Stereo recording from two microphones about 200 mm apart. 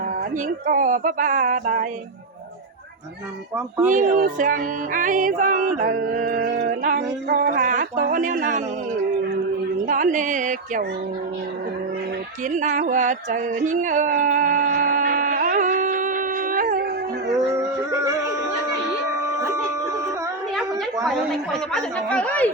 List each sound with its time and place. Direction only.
0.4 s music: 40° right (ahead or behind)
3.9 s music: 40° right (ahead or behind)
7.5 s music: 40° right (ahead or behind)
9.8 s music: 40° right (ahead or behind)
12.5 s a sound: 40° right (ahead or behind)
20.6 s a sound: centre (ahead or behind)
21.7 s speech: 5° left (ahead or behind)